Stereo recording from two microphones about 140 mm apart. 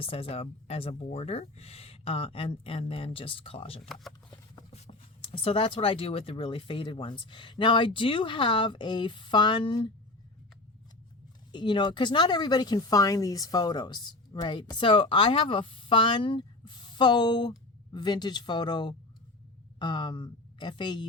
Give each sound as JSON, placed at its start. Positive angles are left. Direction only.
{"t": 0.0, "sound": "speech", "side_deg": 40}
{"t": 5.2, "sound": "speech", "side_deg": 40}
{"t": 11.5, "sound": "speech", "side_deg": 35}